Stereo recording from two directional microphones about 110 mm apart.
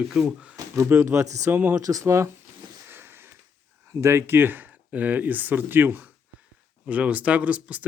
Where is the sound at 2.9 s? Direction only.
20° right (ahead or behind).